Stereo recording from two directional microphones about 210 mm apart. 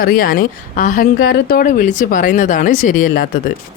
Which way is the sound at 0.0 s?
45° left (ahead or behind).